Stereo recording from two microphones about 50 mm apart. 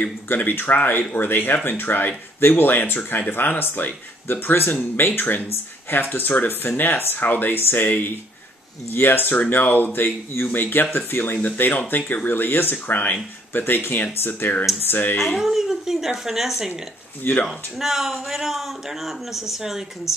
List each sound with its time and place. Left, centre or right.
0.3 s speech: left
9.3 s speech: left
15.1 s a man's voice: centre